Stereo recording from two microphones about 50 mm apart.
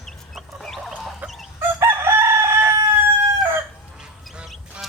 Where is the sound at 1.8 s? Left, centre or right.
Right.